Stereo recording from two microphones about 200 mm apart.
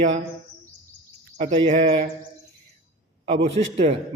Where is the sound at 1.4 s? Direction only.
35° right (ahead or behind).